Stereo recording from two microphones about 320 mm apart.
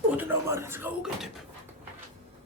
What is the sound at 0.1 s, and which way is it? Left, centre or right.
Speech, centre.